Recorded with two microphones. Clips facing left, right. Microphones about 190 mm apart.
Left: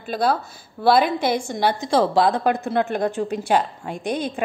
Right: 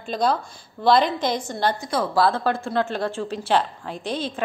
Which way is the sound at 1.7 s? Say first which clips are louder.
Left 5 dB; 30° left (ahead or behind).